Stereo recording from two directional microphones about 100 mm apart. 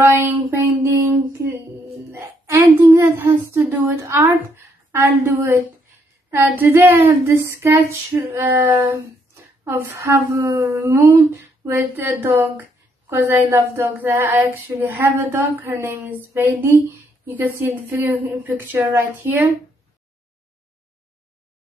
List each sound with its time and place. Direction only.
0.0 s a sound: 20° right (ahead or behind)
2.9 s humming: 30° right (ahead or behind)
4.9 s female singing: 25° right (ahead or behind)
8.9 s speech: 30° right (ahead or behind)
10.4 s female singing: 40° right (ahead or behind); by 18.9 s 20° right (ahead or behind)